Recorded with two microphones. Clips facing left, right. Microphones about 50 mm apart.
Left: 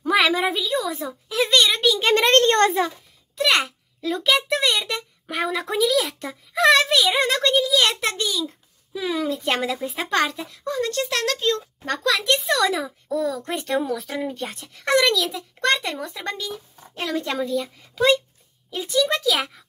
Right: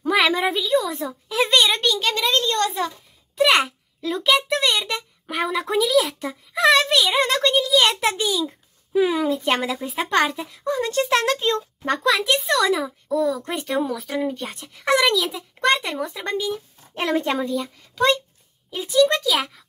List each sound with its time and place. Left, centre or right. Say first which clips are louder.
0.0 s a woman's voice: even; centre
2.1 s a woman's voice: left 5 dB; left
3.3 s a child's voice: right 3 dB; centre
8.5 s babbling: right 1 dB; right
9.2 s speech: right 2 dB; centre; by 12.1 s right
12.1 s a child's voice: right 1 dB; centre
16.9 s a woman's voice: right 4 dB; right
17.4 s a child's voice: even; centre